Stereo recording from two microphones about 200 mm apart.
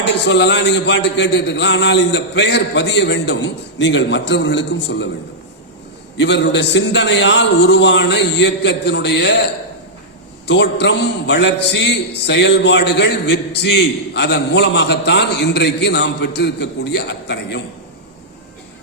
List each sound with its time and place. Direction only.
0.0 s a man's voice: 60° left (ahead or behind)
6.1 s a man's voice: 60° left (ahead or behind)
10.4 s a man's voice: 60° left (ahead or behind)